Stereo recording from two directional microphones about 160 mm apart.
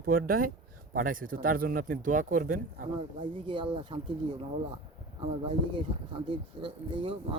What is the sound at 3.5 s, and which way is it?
Speech, 30° right (ahead or behind).